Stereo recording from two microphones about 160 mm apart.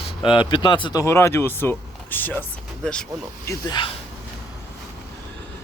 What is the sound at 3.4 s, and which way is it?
Speech, 25° left (ahead or behind).